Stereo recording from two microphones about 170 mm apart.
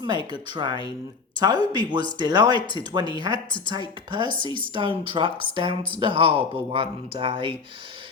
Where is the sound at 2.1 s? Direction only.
25° right (ahead or behind).